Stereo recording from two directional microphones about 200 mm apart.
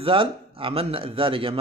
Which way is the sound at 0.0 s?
25° right (ahead or behind).